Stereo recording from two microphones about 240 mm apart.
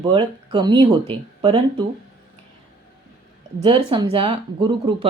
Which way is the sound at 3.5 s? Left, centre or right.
Centre.